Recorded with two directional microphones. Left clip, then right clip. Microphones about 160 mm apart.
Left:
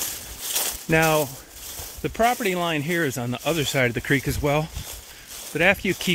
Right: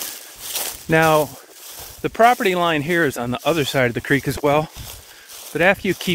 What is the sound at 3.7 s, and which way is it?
Speech, 20° right (ahead or behind).